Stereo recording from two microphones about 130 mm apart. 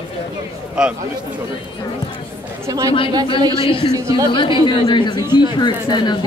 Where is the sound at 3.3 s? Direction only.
30° right (ahead or behind).